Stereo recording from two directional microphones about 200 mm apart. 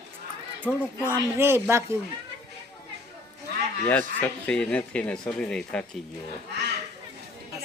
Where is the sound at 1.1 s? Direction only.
10° right (ahead or behind).